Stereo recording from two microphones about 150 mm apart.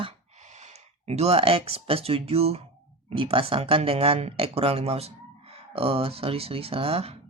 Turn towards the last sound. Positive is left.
turn(degrees=-40)  # may be behind; listen again after turning